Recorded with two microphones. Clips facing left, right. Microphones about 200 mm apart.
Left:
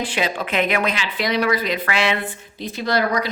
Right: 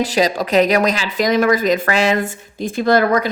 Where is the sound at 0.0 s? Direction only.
40° right (ahead or behind).